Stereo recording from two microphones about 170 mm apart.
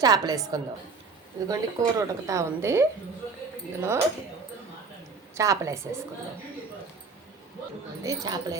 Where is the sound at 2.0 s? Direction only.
20° right (ahead or behind).